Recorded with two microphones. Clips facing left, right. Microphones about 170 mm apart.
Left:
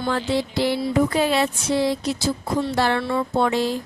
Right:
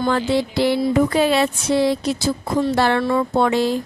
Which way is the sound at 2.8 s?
80° right.